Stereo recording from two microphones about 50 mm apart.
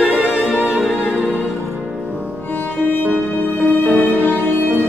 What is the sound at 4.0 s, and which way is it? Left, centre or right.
Music, left.